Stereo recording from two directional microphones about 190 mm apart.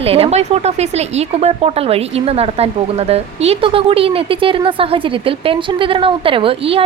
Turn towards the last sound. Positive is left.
turn(degrees=-30)  # may be behind; listen again after turning